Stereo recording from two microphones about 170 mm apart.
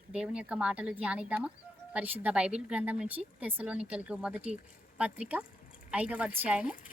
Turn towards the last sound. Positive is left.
turn(degrees=-5)  # may be behind; listen again after turning